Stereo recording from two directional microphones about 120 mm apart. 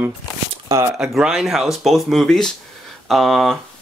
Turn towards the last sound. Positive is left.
turn(degrees=0)  # may be behind; listen again after turning